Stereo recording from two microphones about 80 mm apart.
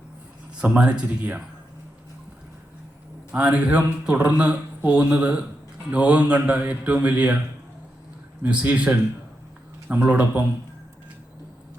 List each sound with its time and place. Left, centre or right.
0.6 s a man's voice: centre
3.3 s a man's voice: centre
8.4 s a man's voice: centre